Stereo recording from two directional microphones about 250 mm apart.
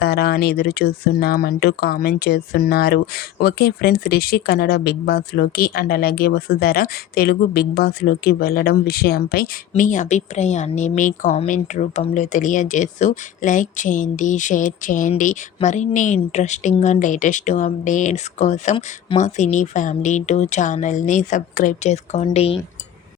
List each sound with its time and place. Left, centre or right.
0.0 s speech: left